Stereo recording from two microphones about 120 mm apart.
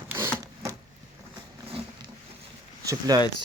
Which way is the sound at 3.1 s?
30° right (ahead or behind).